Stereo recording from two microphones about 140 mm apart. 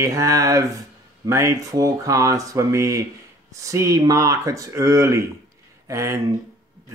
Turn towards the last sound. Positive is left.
turn(degrees=-20)  # may be behind; listen again after turning